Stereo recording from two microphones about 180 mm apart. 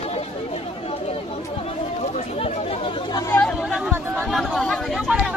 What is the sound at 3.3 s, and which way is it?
Chatter, 5° left (ahead or behind).